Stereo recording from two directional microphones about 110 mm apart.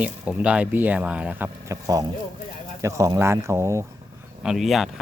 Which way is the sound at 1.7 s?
35° right (ahead or behind).